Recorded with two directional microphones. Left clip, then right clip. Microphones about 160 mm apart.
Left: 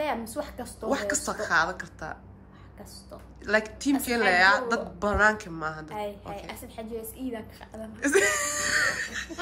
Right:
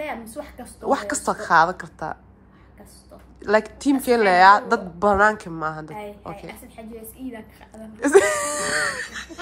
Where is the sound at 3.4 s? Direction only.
5° right (ahead or behind).